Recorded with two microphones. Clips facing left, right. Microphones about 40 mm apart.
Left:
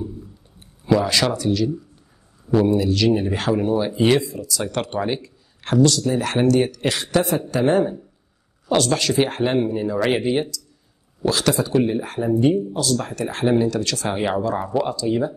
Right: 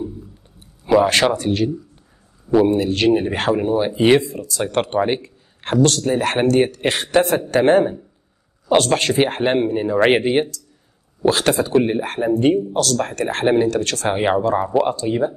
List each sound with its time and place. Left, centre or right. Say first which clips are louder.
0.9 s speech: right 4 dB; right
2.7 s speech: right 2 dB; right
3.5 s speech: right 2 dB; right
4.2 s speech: right 2 dB; right
7.5 s speech: right 4 dB; right